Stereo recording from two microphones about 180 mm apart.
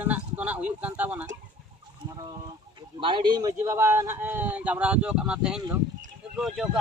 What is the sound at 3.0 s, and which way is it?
A man's voice, 25° right (ahead or behind).